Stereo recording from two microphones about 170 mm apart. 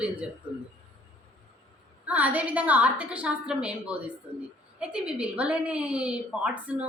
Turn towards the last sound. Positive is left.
turn(degrees=-5)  # may be behind; listen again after turning